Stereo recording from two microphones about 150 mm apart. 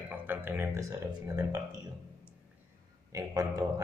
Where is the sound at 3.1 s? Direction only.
20° right (ahead or behind).